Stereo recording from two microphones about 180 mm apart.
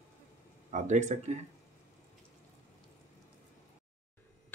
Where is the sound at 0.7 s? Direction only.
40° right (ahead or behind).